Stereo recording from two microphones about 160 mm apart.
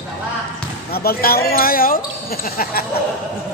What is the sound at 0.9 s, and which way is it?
Speech, 70° left (ahead or behind).